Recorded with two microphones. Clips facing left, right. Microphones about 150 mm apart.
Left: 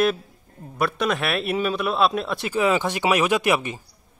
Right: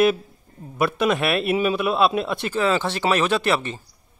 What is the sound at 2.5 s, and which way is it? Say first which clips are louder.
A man's voice: left 1 dB; 15° left (ahead or behind).